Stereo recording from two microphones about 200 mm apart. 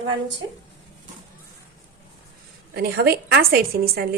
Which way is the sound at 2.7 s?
50° right (ahead or behind).